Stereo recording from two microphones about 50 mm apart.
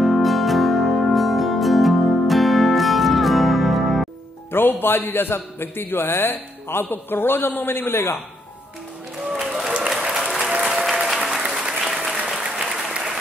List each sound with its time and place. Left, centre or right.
0.0 s music: centre
4.5 s a man's voice: left
9.4 s applause: centre